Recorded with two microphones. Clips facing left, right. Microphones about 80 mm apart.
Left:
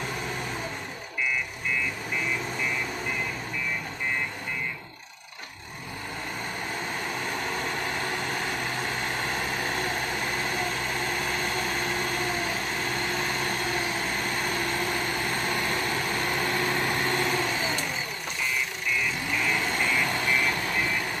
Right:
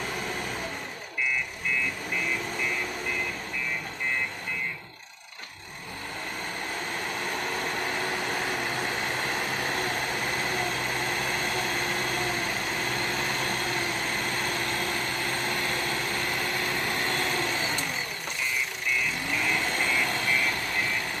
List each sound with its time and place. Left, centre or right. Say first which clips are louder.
7.1 s a sound: right 1 dB; centre
8.1 s vehicle: even; centre
17.3 s vehicle: left 2 dB; centre
19.3 s vehicle: left 1 dB; centre
20.1 s vehicle: left 2 dB; centre